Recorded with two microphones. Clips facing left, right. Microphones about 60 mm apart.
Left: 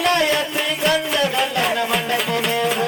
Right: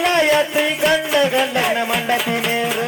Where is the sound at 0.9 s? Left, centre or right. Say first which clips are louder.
Right 1 dB; centre.